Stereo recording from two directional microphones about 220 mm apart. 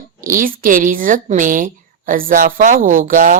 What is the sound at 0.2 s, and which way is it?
Speech, 40° right (ahead or behind).